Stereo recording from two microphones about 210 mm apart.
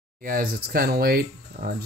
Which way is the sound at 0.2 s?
40° right (ahead or behind).